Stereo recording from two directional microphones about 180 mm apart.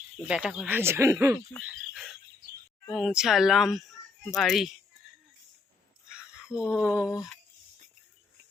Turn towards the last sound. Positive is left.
turn(degrees=-5)  # may be behind; listen again after turning